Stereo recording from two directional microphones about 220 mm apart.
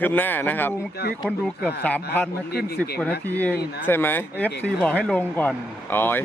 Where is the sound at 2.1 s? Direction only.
10° left (ahead or behind).